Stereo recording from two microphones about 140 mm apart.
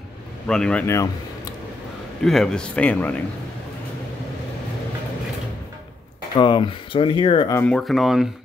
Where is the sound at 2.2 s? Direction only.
Centre (ahead or behind).